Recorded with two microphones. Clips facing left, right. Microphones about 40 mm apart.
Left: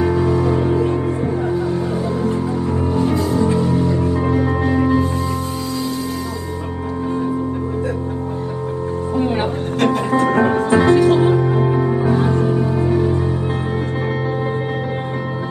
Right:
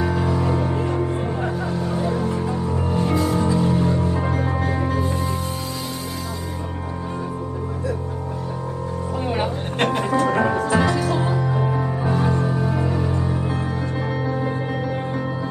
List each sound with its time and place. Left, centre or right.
0.3 s music: left
2.2 s music: left
2.9 s music: right
3.4 s music: left
9.2 s music: left
11.6 s music: left
12.3 s music: left